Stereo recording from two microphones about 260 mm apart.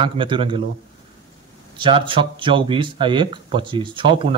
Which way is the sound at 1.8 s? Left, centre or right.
Centre.